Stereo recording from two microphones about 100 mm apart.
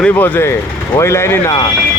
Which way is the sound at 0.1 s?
20° left (ahead or behind).